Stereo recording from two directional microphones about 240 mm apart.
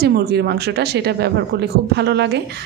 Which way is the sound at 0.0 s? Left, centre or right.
Right.